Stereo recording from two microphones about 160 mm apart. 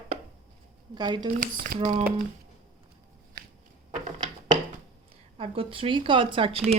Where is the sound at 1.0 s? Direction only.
30° right (ahead or behind).